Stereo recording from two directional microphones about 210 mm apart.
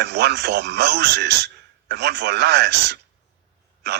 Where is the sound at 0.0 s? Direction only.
55° right (ahead or behind).